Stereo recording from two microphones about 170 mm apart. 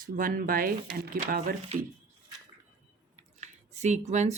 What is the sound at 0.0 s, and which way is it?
Speech, 55° right (ahead or behind).